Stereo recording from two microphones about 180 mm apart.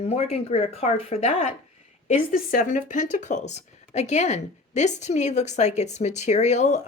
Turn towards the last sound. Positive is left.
turn(degrees=40)  # may be behind; listen again after turning